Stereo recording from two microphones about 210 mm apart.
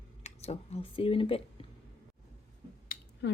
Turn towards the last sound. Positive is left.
turn(degrees=55)  # may be behind; listen again after turning